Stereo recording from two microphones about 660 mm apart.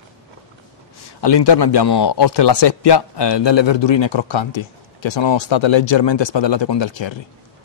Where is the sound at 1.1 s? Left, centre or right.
Left.